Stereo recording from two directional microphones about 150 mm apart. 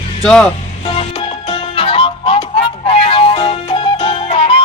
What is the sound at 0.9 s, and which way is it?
Music, 40° left (ahead or behind).